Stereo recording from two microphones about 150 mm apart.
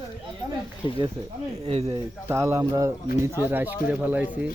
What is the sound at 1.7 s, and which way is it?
Speech, 45° right (ahead or behind).